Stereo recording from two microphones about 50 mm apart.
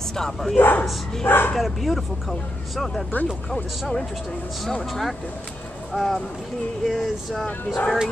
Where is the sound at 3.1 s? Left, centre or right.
Left.